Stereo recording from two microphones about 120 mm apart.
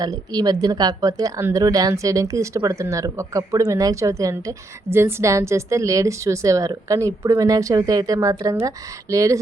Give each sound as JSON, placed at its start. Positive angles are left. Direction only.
{"t": 0.0, "sound": "speech", "side_deg": -35}